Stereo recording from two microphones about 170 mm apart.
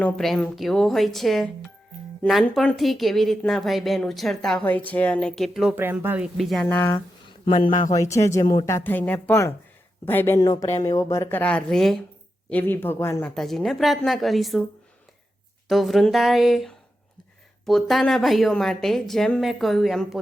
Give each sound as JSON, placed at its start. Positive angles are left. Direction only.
{"t": 0.0, "sound": "a woman's voice", "side_deg": 5}
{"t": 6.3, "sound": "a woman's voice", "side_deg": 0}
{"t": 6.7, "sound": "speech", "side_deg": 15}
{"t": 7.5, "sound": "speech", "side_deg": 35}
{"t": 8.1, "sound": "speech", "side_deg": 15}
{"t": 13.3, "sound": "a woman's voice", "side_deg": 0}
{"t": 15.7, "sound": "a woman's voice", "side_deg": 0}